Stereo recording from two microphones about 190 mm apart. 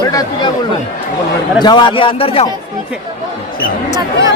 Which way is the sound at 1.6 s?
25° left (ahead or behind).